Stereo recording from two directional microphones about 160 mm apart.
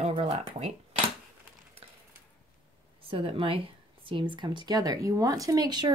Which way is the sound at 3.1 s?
35° right (ahead or behind).